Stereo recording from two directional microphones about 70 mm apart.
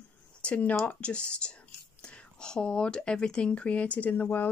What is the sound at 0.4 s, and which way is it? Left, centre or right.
Speech, centre.